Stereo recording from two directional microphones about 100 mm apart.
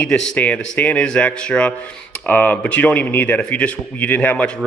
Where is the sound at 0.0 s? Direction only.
10° left (ahead or behind).